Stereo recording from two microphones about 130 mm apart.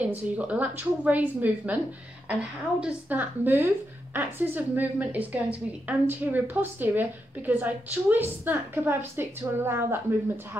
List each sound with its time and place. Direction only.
0.0 s a woman's voice: 10° right (ahead or behind)
2.8 s a woman's voice: 15° right (ahead or behind)